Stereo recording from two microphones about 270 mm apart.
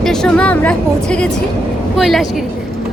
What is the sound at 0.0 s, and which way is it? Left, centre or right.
Speech, centre.